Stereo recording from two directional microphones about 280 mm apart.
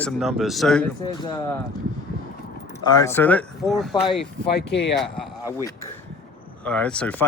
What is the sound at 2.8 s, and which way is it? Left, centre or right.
Speech, centre.